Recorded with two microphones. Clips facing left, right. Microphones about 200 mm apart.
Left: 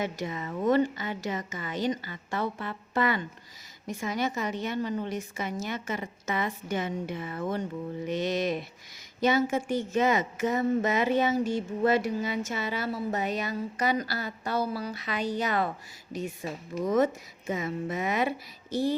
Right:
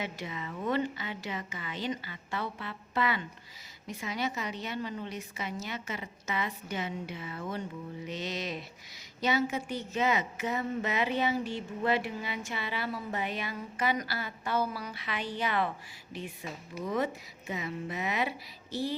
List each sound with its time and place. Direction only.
0.0 s a woman's voice: 45° left (ahead or behind)